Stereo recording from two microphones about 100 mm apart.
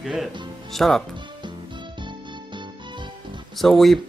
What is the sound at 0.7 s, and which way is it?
Speech, centre (ahead or behind).